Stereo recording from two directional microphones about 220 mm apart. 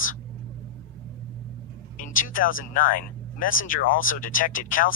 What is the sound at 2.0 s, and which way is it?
Speech, 40° left (ahead or behind).